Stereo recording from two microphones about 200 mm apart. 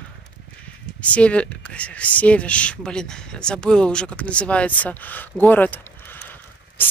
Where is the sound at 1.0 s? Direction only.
5° left (ahead or behind).